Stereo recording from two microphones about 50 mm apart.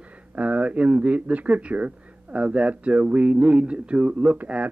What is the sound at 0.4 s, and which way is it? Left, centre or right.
Speech, right.